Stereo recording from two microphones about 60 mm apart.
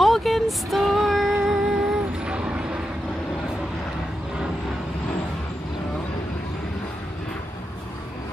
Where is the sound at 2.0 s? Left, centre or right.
Centre.